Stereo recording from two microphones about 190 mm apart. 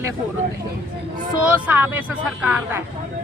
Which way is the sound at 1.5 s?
5° right (ahead or behind).